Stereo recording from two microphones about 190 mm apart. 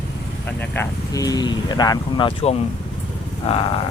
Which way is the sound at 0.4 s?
10° left (ahead or behind).